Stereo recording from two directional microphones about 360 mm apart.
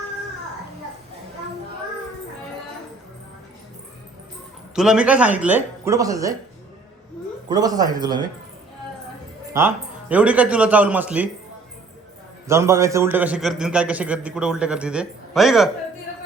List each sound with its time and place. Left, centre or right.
4.7 s a man's voice: centre
7.5 s speech: centre
9.5 s a man's voice: centre
12.5 s a man's voice: centre